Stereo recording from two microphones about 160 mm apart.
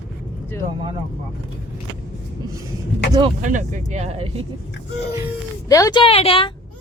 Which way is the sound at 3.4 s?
50° right (ahead or behind).